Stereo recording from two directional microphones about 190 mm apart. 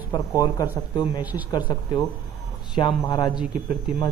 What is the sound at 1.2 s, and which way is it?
Speech, 10° right (ahead or behind).